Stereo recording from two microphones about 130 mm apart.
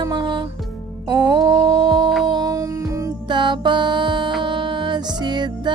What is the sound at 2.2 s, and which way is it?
Music, 30° right (ahead or behind).